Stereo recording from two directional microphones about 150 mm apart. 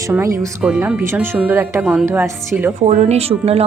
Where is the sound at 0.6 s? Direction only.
5° right (ahead or behind).